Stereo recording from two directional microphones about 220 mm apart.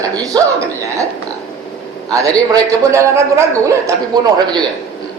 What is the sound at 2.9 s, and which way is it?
A man's voice, 10° right (ahead or behind).